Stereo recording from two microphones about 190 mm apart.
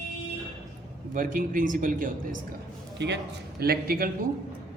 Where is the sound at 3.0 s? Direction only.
65° right (ahead or behind).